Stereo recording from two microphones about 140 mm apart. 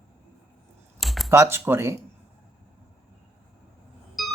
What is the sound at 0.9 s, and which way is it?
Computer keyboard, centre (ahead or behind).